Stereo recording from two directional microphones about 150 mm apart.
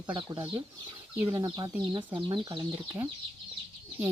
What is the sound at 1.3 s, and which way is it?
Speech, 30° right (ahead or behind).